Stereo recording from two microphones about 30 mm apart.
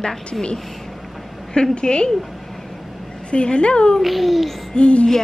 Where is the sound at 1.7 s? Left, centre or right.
Left.